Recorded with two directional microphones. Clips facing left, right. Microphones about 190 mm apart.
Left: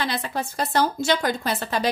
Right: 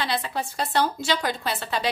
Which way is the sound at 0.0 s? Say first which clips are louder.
Left 1 dB; 45° left (ahead or behind).